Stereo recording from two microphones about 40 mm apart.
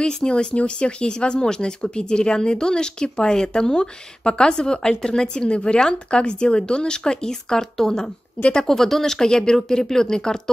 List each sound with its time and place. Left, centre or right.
0.0 s speech: centre